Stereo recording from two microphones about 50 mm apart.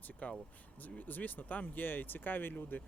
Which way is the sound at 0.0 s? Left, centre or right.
Left.